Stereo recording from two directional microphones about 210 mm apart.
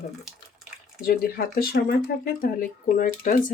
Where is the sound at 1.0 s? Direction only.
45° left (ahead or behind).